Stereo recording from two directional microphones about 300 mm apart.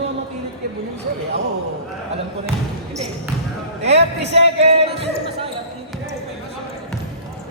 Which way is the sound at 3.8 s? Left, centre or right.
Right.